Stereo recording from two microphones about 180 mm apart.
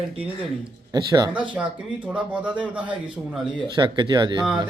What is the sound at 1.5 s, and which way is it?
A man's voice, 5° right (ahead or behind).